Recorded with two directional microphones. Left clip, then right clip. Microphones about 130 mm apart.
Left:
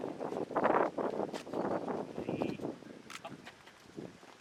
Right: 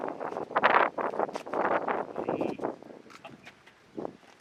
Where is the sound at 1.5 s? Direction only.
25° right (ahead or behind).